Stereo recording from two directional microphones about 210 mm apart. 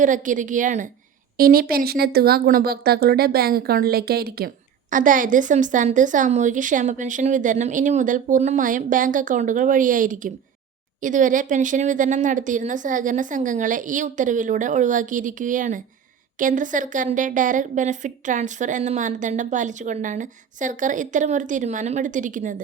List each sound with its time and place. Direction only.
0.0 s speech: 35° right (ahead or behind)